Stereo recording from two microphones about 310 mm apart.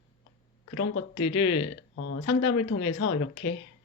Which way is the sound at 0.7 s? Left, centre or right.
Left.